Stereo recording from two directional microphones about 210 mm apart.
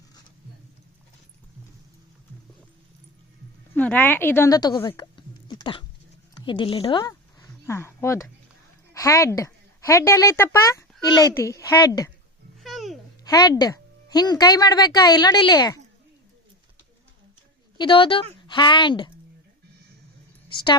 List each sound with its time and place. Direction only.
3.8 s a woman's voice: 5° left (ahead or behind)
12.6 s babbling: centre (ahead or behind)
13.2 s speech: 20° left (ahead or behind)
17.7 s speech: 25° left (ahead or behind)